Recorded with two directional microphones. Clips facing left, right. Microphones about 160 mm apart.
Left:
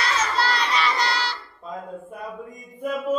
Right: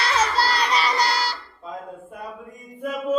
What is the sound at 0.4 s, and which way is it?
Music, 35° right (ahead or behind).